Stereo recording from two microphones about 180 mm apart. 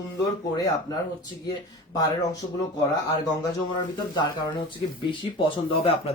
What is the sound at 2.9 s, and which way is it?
Speech, 25° left (ahead or behind).